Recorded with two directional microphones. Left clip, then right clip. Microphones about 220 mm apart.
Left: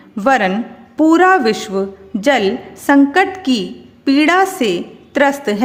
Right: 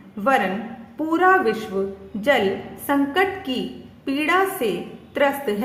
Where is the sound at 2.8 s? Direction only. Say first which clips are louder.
Left 9 dB; 50° left (ahead or behind).